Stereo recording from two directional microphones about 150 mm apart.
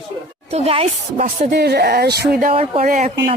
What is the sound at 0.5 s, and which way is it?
Speech, 40° right (ahead or behind).